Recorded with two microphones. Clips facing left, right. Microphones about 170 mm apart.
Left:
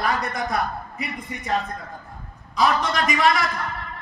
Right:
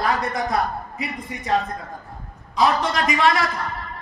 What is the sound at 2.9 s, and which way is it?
Speech, 30° right (ahead or behind).